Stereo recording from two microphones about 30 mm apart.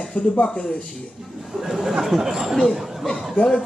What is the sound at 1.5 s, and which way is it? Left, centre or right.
Speech, centre.